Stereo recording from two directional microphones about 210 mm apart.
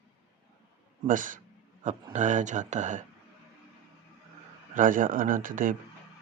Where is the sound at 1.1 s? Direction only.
40° right (ahead or behind).